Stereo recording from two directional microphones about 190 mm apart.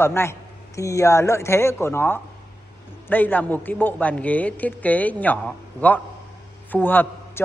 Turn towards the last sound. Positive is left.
turn(degrees=10)  # may be behind; listen again after turning